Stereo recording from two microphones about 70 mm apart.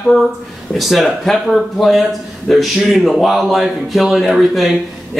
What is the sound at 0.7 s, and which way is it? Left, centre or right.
Speech, centre.